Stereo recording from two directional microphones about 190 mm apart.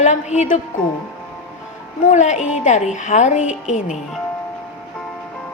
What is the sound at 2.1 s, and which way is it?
A woman's voice, 40° left (ahead or behind).